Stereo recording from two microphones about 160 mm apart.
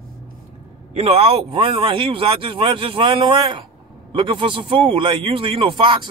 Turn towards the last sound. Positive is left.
turn(degrees=-30)  # may be behind; listen again after turning